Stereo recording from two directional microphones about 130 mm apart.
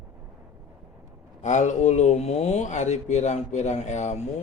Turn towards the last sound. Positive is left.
turn(degrees=60)  # may be behind; listen again after turning